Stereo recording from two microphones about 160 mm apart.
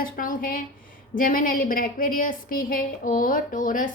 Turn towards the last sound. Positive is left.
turn(degrees=55)  # may be behind; listen again after turning